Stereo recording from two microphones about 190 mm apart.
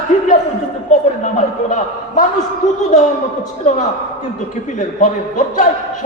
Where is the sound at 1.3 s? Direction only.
40° left (ahead or behind).